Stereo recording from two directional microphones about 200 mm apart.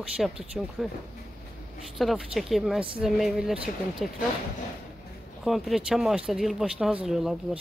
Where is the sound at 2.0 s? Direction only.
Centre (ahead or behind).